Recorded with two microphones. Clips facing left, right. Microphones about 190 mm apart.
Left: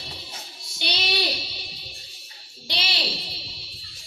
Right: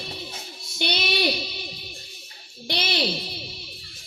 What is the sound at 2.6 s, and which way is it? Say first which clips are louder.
Music: right 6 dB; 50° right (ahead or behind).